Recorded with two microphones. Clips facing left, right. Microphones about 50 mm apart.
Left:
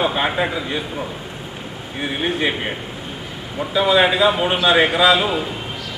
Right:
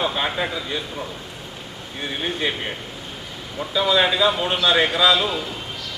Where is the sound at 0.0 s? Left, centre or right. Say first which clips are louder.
Left 4 dB; centre.